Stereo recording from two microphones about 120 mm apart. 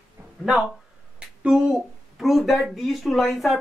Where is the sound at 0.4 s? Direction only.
Centre (ahead or behind).